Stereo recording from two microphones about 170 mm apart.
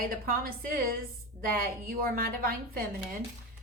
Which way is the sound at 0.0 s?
60° right (ahead or behind).